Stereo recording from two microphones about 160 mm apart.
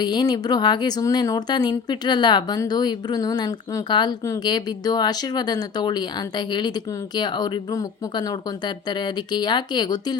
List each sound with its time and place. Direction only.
0.0 s speech: 25° left (ahead or behind)